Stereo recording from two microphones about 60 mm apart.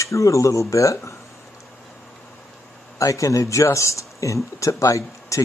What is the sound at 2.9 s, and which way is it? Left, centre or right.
Speech, left.